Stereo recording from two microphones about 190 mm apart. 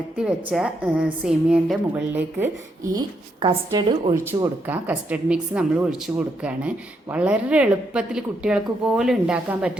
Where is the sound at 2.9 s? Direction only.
25° right (ahead or behind).